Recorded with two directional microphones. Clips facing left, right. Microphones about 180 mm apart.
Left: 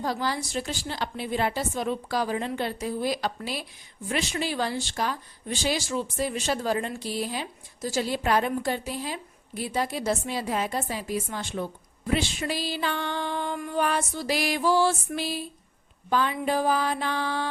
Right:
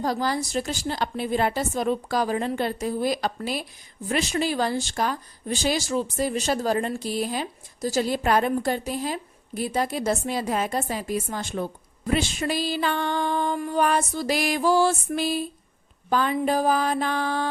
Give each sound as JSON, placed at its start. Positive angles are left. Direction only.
{"t": 0.0, "sound": "speech", "side_deg": -40}